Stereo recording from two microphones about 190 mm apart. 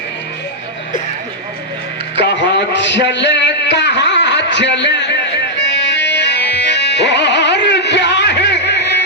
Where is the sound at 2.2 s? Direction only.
65° left (ahead or behind).